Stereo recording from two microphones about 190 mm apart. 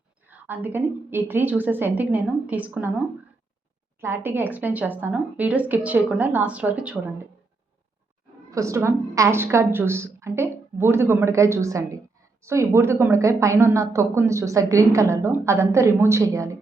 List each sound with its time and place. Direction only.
0.3 s a woman's voice: 10° right (ahead or behind)
4.0 s a woman's voice: 10° right (ahead or behind)
8.4 s a woman's voice: 15° right (ahead or behind)